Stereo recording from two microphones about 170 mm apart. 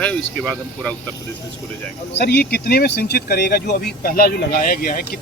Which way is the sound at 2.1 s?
70° left (ahead or behind).